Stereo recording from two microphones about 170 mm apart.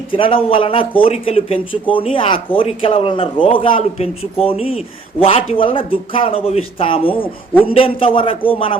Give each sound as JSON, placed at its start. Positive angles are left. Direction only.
{"t": 0.1, "sound": "speech", "side_deg": 30}